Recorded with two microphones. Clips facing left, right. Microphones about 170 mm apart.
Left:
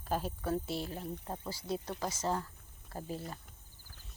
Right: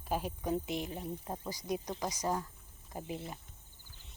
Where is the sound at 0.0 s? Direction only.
10° right (ahead or behind).